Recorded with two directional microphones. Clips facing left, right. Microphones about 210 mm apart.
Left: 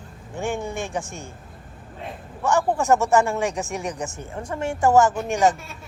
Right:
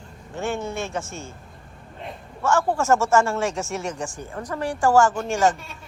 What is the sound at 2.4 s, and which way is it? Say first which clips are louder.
Speech: even; 15° left (ahead or behind).